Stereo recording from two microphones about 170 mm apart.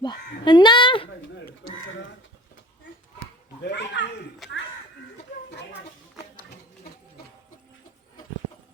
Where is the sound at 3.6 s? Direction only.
85° left.